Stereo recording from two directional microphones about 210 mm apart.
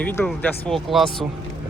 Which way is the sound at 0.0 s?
10° left (ahead or behind).